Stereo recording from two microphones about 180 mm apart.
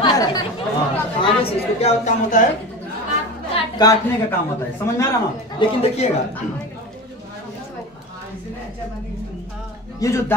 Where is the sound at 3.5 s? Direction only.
25° left (ahead or behind).